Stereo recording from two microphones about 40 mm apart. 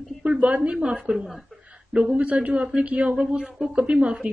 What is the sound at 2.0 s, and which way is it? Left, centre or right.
A woman's voice, right.